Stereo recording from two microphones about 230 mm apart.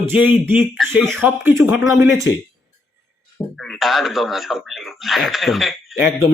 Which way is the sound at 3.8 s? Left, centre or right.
Centre.